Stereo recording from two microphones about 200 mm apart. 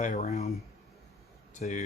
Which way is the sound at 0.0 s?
40° left (ahead or behind).